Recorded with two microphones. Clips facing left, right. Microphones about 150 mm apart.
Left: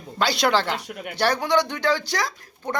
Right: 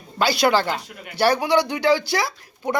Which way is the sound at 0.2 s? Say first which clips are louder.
Right 2 dB; 5° right (ahead or behind).